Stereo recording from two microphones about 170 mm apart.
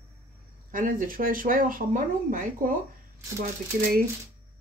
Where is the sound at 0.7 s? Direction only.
55° right (ahead or behind).